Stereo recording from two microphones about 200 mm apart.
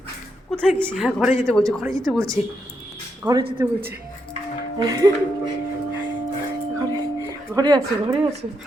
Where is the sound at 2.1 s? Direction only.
15° right (ahead or behind).